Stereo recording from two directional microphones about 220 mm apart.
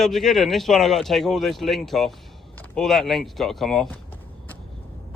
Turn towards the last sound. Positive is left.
turn(degrees=10)  # may be behind; listen again after turning